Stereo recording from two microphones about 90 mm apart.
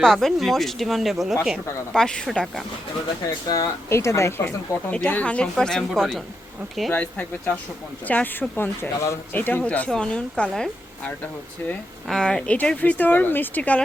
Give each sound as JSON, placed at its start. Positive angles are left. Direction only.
{"t": 0.0, "sound": "speech", "side_deg": 5}
{"t": 3.4, "sound": "speech", "side_deg": 40}
{"t": 3.8, "sound": "speech", "side_deg": 30}
{"t": 4.9, "sound": "speech", "side_deg": 15}
{"t": 6.9, "sound": "speech", "side_deg": 15}
{"t": 12.0, "sound": "speech", "side_deg": 5}